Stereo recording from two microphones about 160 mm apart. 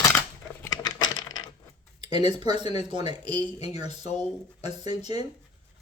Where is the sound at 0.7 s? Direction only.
25° left (ahead or behind).